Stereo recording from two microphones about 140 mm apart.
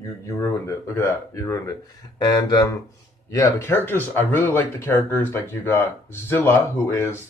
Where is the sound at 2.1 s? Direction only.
30° left (ahead or behind).